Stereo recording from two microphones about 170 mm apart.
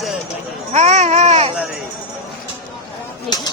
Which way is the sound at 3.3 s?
25° left (ahead or behind).